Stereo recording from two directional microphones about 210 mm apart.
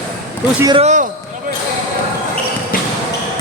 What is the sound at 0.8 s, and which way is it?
Speech, 35° right (ahead or behind).